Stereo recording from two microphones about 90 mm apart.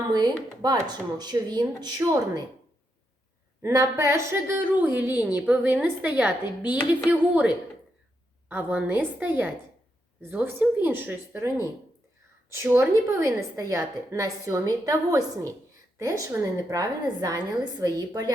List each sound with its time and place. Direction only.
0.1 s speech: 50° right (ahead or behind)
3.6 s a woman's voice: 35° right (ahead or behind)